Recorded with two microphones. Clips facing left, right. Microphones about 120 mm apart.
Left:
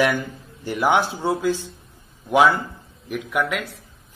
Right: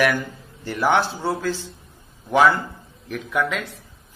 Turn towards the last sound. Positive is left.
turn(degrees=10)  # may be behind; listen again after turning